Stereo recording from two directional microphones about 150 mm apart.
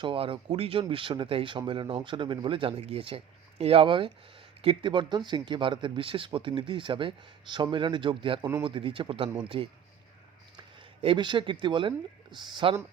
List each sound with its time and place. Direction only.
0.0 s speech: 35° right (ahead or behind)
11.0 s speech: 30° right (ahead or behind)